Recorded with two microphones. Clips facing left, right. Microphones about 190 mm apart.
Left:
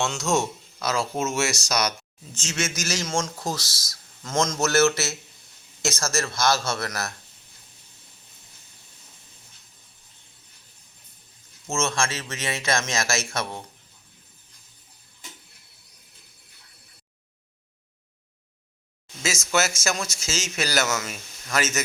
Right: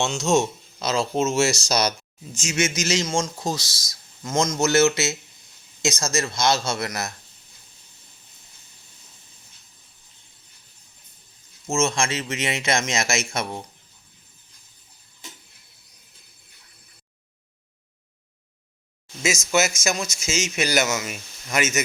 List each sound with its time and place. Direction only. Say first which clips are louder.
0.0 s speech: right 3 dB; 20° right (ahead or behind)
2.3 s speech: right 5 dB; 10° right (ahead or behind)
11.7 s speech: right 3 dB; 15° right (ahead or behind)
19.5 s speech: right 1 dB; 10° right (ahead or behind)